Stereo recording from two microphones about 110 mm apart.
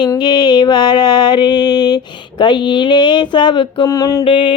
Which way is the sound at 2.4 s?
45° left (ahead or behind).